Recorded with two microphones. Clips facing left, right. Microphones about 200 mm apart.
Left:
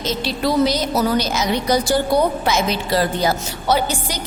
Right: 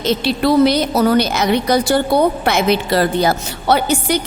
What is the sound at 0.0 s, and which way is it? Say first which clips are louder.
A woman's voice: right 5 dB; 65° right (ahead or behind).